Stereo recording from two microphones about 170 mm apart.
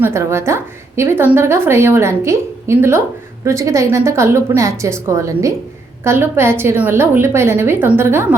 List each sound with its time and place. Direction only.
0.0 s a woman's voice: 15° right (ahead or behind)